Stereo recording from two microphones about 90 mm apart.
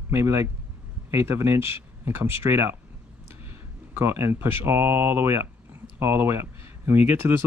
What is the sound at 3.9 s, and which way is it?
Speech, 25° right (ahead or behind).